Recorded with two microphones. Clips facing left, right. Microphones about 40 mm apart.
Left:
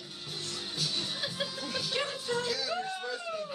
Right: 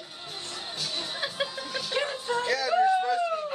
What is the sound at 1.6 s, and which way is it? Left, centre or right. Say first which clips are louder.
Music: right 2 dB; centre.